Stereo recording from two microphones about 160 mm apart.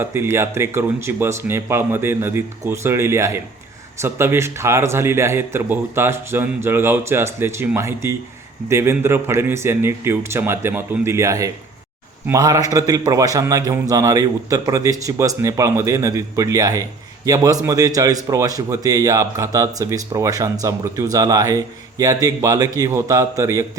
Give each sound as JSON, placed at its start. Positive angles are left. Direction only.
{"t": 0.0, "sound": "a man's voice", "side_deg": -15}